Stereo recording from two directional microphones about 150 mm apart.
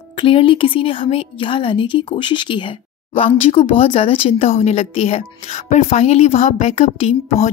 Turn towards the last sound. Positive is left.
turn(degrees=45)  # may be behind; listen again after turning